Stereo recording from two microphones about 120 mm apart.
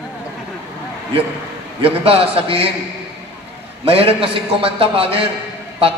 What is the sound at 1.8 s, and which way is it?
Speech, 55° right (ahead or behind).